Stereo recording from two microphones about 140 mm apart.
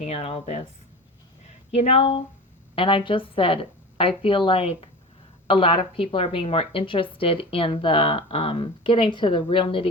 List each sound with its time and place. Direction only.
0.0 s speech: 50° left (ahead or behind)
1.7 s a woman's voice: 50° left (ahead or behind)